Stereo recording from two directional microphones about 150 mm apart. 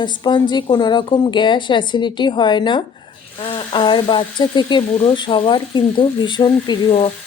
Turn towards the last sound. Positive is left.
turn(degrees=30)  # may be behind; listen again after turning